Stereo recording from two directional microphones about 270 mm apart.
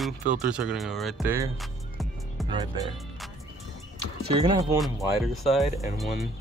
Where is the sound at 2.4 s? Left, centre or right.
Centre.